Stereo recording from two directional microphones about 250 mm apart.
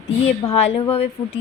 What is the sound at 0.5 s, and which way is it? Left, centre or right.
Speech, left.